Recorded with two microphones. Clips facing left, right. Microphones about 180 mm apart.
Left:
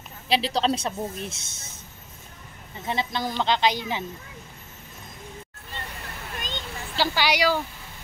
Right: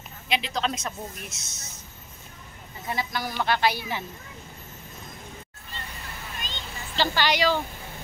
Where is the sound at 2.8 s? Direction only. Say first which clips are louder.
Left 3 dB; 25° left (ahead or behind).